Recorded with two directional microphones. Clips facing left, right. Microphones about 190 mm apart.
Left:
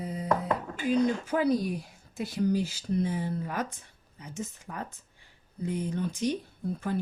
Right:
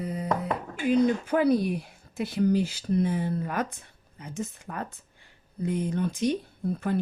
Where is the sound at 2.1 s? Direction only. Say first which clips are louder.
Right 3 dB; 60° right (ahead or behind).